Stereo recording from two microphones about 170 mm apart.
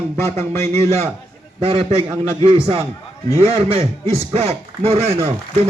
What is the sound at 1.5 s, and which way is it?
Speech, 30° right (ahead or behind).